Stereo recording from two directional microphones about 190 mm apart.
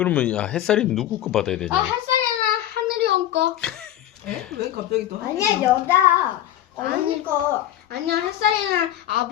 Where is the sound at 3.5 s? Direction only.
5° left (ahead or behind).